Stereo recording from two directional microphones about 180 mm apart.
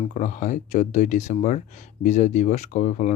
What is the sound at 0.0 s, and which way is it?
Speech, 40° left (ahead or behind).